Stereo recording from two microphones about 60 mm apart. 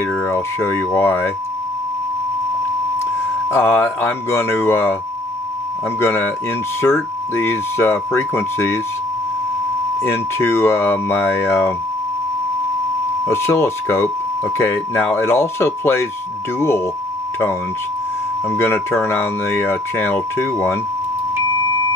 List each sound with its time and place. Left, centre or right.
0.3 s speech: left
3.4 s speech: left
5.9 s speech: left
10.0 s speech: left
13.3 s speech: left
18.5 s speech: left